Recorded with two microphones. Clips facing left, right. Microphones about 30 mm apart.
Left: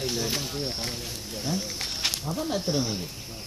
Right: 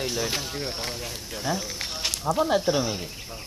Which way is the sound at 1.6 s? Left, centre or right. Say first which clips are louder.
Even; centre.